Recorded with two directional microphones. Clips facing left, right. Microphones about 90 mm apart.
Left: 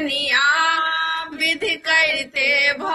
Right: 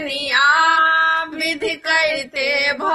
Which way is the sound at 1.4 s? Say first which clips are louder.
Right 2 dB; 15° right (ahead or behind).